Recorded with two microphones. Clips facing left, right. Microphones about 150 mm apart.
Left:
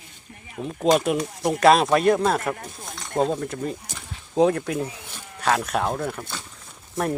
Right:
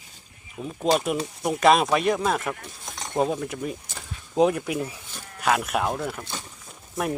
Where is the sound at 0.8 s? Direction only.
Centre (ahead or behind).